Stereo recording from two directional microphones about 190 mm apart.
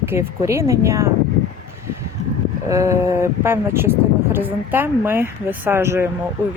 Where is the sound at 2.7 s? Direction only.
15° right (ahead or behind).